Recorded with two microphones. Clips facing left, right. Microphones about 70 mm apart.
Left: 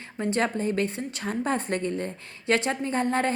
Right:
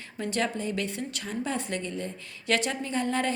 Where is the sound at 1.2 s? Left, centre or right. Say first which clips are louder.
Left 6 dB; left.